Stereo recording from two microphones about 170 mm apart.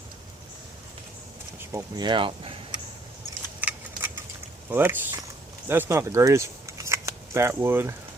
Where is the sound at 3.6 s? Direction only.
10° right (ahead or behind).